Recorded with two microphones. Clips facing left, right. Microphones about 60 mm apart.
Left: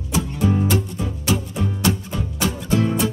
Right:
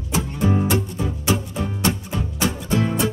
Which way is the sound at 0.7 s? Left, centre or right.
Centre.